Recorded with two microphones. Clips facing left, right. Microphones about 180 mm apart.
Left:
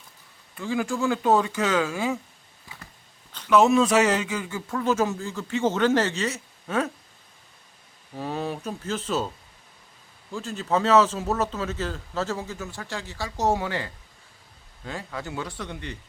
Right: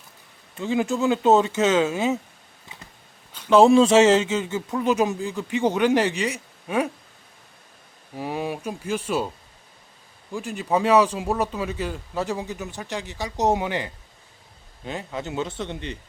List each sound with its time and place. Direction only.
0.5 s speech: 20° right (ahead or behind)
3.5 s a man's voice: 30° right (ahead or behind); by 6.9 s 15° right (ahead or behind)
8.1 s a man's voice: 10° right (ahead or behind)
10.3 s a man's voice: 15° right (ahead or behind)